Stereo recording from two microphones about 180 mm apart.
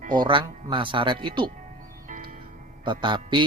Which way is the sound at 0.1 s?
25° right (ahead or behind).